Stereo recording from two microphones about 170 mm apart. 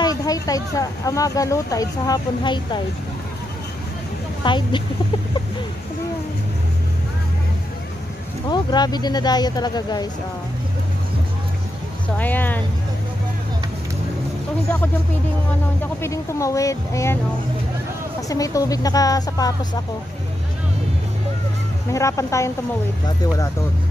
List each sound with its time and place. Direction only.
0.0 s speech: 20° left (ahead or behind)
4.5 s speech: 30° left (ahead or behind)
8.5 s speech: 25° left (ahead or behind)
12.2 s speech: 10° left (ahead or behind)
15.8 s speech: 15° left (ahead or behind)
18.3 s speech: 20° left (ahead or behind)
21.9 s speech: 20° left (ahead or behind)